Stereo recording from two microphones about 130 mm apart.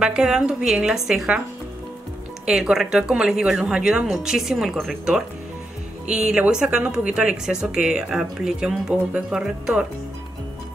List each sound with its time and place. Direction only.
0.0 s a woman's voice: 5° right (ahead or behind)
2.4 s a woman's voice: 5° right (ahead or behind)